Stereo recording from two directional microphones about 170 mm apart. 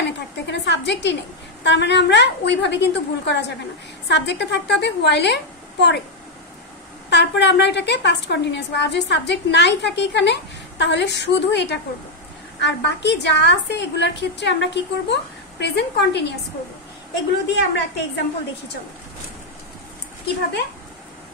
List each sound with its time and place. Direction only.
0.0 s a woman's voice: 90° left
7.1 s a woman's voice: 90° left